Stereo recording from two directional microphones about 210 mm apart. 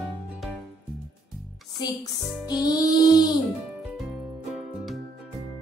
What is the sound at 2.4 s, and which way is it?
Music, 20° left (ahead or behind).